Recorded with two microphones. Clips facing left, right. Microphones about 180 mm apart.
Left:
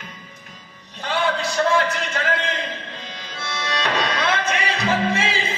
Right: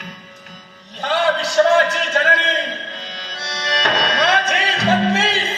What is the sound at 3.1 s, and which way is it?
Music, 90° right.